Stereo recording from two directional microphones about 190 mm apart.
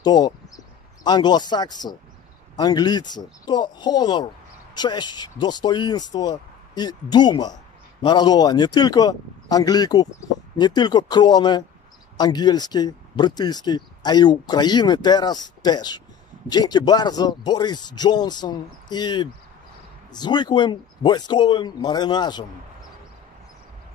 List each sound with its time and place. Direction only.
0.0 s speech: 20° left (ahead or behind)